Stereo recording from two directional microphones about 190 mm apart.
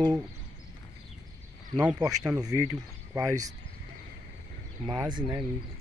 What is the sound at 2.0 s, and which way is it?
Speech, 20° right (ahead or behind).